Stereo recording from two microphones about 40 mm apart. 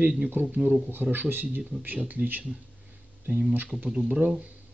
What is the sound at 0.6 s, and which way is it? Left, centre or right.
Speech, centre.